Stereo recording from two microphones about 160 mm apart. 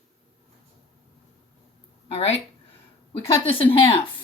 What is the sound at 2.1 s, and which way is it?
Speech, 40° left (ahead or behind).